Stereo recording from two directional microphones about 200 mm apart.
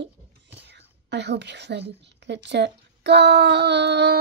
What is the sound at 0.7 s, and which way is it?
A woman's voice, 60° right (ahead or behind).